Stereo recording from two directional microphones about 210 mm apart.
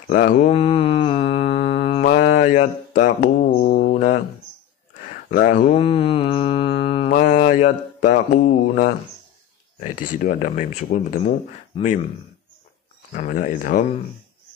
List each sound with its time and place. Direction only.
0.1 s speech: 40° left (ahead or behind)
0.5 s mantra: 30° left (ahead or behind)
5.3 s speech: 40° left (ahead or behind)
5.8 s mantra: 25° left (ahead or behind)
7.1 s mantra: 40° left (ahead or behind)
9.8 s speech: 40° left (ahead or behind)
13.1 s speech: 40° left (ahead or behind)